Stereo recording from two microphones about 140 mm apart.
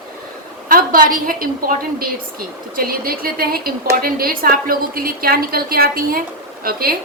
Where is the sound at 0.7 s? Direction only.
85° right.